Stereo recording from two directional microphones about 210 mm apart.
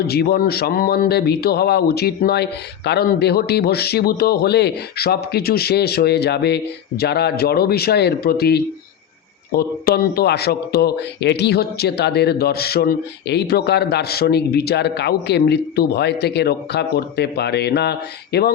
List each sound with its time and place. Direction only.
0.1 s speech: 45° left (ahead or behind)